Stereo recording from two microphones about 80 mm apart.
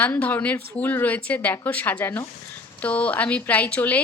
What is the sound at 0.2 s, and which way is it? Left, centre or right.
A woman's voice, left.